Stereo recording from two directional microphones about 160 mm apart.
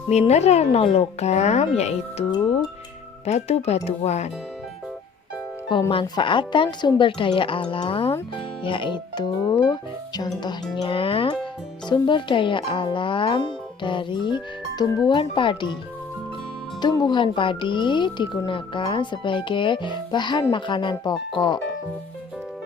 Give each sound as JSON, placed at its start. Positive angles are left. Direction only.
{"t": 0.1, "sound": "speech", "side_deg": 45}
{"t": 2.3, "sound": "speech", "side_deg": 25}
{"t": 3.2, "sound": "speech", "side_deg": 40}
{"t": 5.9, "sound": "speech", "side_deg": 30}
{"t": 16.8, "sound": "speech", "side_deg": 25}